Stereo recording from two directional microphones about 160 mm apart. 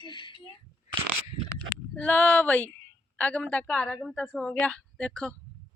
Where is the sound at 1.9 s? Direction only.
10° left (ahead or behind).